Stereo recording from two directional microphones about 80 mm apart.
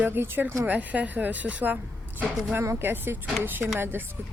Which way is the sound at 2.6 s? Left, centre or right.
Right.